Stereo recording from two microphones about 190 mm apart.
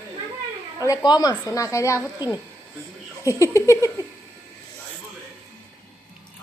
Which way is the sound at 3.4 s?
15° left (ahead or behind).